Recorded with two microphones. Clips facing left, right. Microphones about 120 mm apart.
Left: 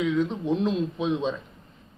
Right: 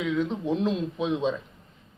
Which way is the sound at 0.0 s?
Centre (ahead or behind).